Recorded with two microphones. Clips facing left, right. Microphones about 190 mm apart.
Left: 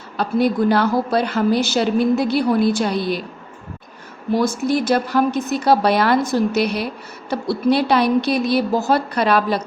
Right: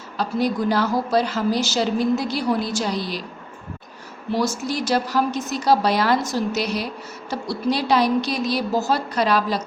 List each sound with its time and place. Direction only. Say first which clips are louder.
0.2 s a woman's voice: left 4 dB; 60° left (ahead or behind)
4.3 s a woman's voice: left 5 dB; 55° left (ahead or behind)